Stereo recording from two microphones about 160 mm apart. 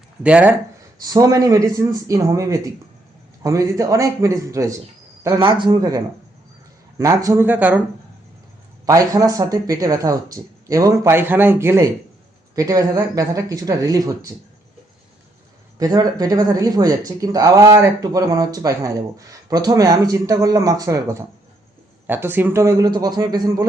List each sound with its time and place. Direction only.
0.2 s speech: 10° right (ahead or behind)
1.0 s speech: 20° right (ahead or behind)
7.0 s speech: 20° right (ahead or behind)
8.9 s speech: 20° right (ahead or behind)
15.8 s speech: 25° right (ahead or behind)